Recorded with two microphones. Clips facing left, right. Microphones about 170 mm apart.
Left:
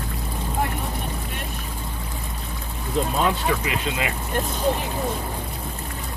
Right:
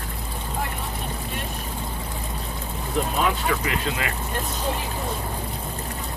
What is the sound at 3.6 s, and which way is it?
Speech, 20° left (ahead or behind).